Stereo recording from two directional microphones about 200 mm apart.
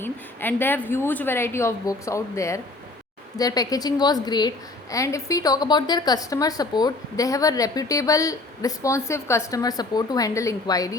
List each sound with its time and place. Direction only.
0.0 s a woman's voice: 10° left (ahead or behind)